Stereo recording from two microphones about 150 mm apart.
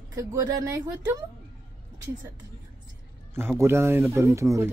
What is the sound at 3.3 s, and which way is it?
A man's voice, 15° right (ahead or behind).